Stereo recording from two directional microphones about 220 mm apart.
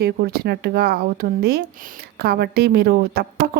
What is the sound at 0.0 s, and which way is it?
A woman's voice, 45° right (ahead or behind).